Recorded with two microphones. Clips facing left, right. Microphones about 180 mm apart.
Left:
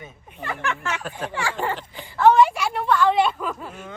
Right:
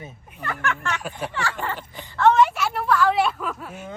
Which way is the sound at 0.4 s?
Centre (ahead or behind).